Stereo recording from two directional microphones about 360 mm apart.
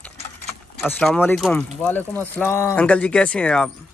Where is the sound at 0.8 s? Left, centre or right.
Centre.